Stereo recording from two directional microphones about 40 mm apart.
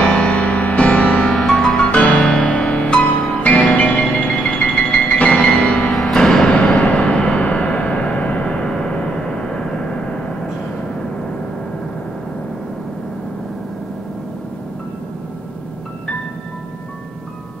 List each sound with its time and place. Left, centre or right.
0.0 s music: left
1.2 s music: centre
1.8 s music: left
5.9 s music: centre
6.8 s music: left
7.4 s a sound: left
9.5 s vehicle: centre